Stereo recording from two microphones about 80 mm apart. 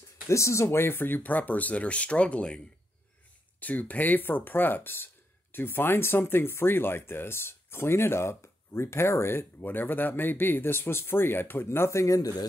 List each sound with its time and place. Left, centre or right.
0.3 s speech: left